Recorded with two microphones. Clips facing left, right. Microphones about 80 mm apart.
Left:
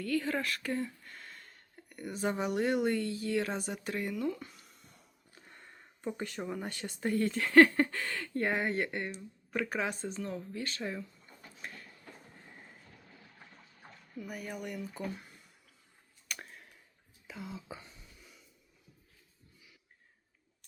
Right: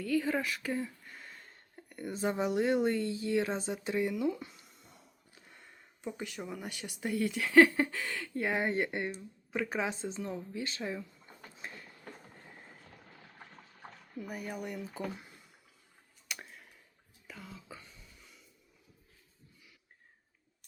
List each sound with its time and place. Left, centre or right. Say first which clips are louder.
0.0 s speech: right 1 dB; centre
1.5 s speech: right 2 dB; right
6.3 s speech: left 3 dB; centre
6.6 s speech: left 3 dB; centre
8.6 s speech: right 1 dB; right
14.3 s speech: right 1 dB; centre
14.8 s speech: even; right
17.2 s speech: left 5 dB; centre